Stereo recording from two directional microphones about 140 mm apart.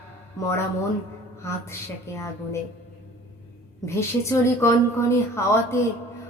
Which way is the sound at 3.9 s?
20° left (ahead or behind).